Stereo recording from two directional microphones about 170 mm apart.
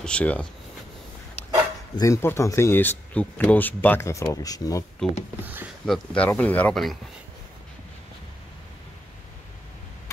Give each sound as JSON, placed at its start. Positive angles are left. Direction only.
{"t": 0.0, "sound": "speech", "side_deg": 5}
{"t": 2.0, "sound": "speech", "side_deg": 15}
{"t": 5.4, "sound": "speech", "side_deg": -10}
{"t": 5.9, "sound": "speech", "side_deg": 10}